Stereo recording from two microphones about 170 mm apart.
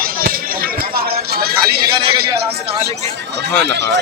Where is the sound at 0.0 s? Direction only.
60° right (ahead or behind).